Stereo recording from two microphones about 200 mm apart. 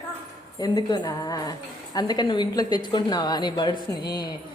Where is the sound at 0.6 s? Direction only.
20° left (ahead or behind).